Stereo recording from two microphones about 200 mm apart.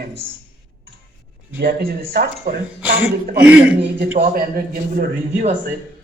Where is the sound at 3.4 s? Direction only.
5° right (ahead or behind).